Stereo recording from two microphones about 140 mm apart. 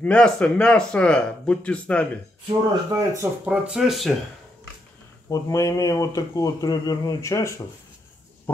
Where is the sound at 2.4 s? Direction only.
25° right (ahead or behind).